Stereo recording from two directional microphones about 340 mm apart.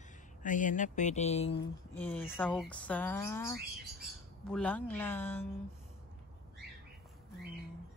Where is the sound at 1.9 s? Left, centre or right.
Centre.